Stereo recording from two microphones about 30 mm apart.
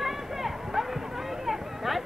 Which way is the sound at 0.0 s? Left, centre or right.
Centre.